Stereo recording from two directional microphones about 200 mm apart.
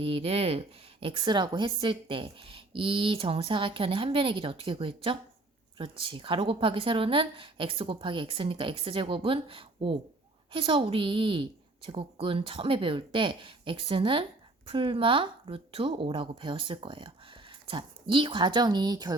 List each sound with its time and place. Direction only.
0.0 s a woman's voice: 30° right (ahead or behind)